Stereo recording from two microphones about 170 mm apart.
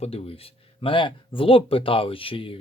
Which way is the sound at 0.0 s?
35° left (ahead or behind).